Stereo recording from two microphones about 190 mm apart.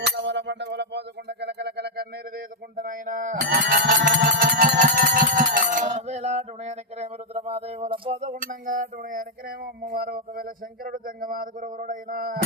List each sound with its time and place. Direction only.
0.0 s music: 65° right (ahead or behind)
2.8 s a sound: 45° right (ahead or behind)
3.7 s bell: 45° right (ahead or behind)
4.8 s music: 45° right (ahead or behind); by 8.2 s 30° right (ahead or behind)
8.2 s speech: 40° right (ahead or behind)